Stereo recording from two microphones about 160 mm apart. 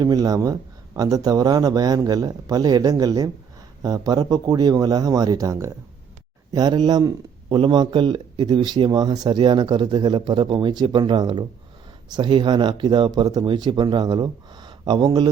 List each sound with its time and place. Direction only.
0.0 s speech: 25° right (ahead or behind)